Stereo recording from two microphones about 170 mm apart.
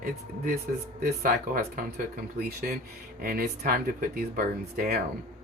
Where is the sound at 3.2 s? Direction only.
60° right (ahead or behind).